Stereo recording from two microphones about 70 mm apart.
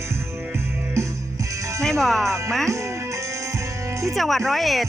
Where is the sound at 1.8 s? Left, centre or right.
Centre.